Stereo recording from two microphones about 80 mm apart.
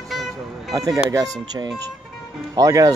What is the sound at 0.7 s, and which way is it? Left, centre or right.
Speech, right.